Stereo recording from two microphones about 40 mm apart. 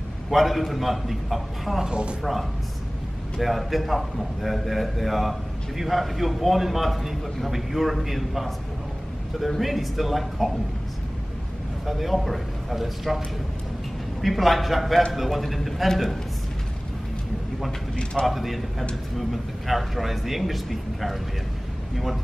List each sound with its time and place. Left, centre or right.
0.3 s a man's voice: centre
1.9 s speech: right
3.3 s a man's voice: centre
9.6 s a man's voice: centre
11.8 s a man's voice: centre
14.2 s a man's voice: centre
17.6 s speech: centre
18.2 s a man's voice: centre